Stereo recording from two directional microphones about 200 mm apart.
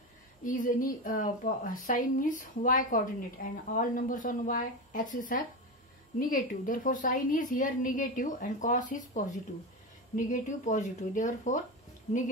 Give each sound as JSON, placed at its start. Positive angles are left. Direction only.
{"t": 0.4, "sound": "a woman's voice", "side_deg": 40}